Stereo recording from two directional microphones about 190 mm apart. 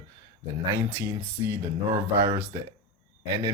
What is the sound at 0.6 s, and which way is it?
Speech, 15° right (ahead or behind).